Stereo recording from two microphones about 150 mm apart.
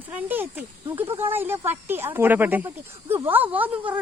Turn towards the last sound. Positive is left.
turn(degrees=-10)  # may be behind; listen again after turning